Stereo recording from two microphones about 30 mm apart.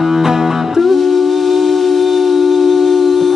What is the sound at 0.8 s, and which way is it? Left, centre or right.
Music, centre.